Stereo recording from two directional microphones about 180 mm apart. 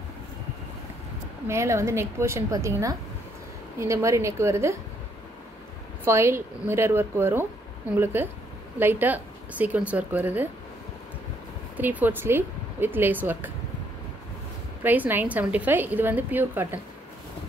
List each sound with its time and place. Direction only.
1.5 s a woman's voice: 15° right (ahead or behind)
6.0 s a woman's voice: 15° right (ahead or behind)
11.7 s a woman's voice: 10° right (ahead or behind)
14.8 s a woman's voice: 10° right (ahead or behind)